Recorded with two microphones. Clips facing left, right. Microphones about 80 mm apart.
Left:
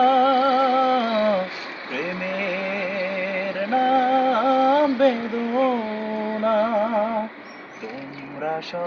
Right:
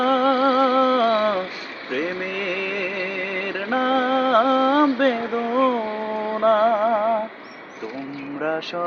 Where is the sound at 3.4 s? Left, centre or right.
Right.